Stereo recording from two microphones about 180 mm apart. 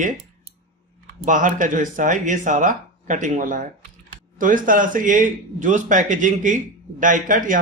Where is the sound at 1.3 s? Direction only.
45° right (ahead or behind).